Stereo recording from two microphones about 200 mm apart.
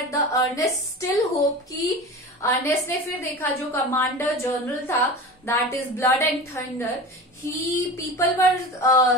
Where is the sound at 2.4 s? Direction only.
15° left (ahead or behind).